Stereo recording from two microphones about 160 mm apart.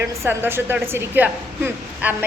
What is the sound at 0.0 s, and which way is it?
Speech, 15° right (ahead or behind).